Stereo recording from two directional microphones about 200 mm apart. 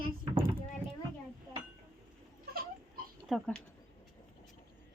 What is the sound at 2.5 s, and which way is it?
Baby cry, 50° right (ahead or behind).